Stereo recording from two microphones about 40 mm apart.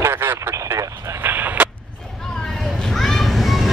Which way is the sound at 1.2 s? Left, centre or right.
Right.